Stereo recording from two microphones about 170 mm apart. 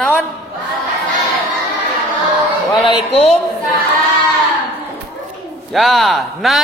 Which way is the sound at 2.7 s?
35° left (ahead or behind).